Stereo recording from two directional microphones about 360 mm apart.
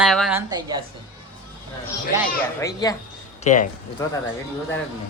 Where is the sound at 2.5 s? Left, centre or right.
Centre.